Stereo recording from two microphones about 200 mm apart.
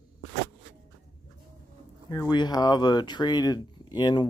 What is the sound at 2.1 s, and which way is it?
Speech, 20° left (ahead or behind).